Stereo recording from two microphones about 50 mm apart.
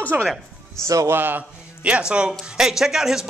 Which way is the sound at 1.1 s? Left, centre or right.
Right.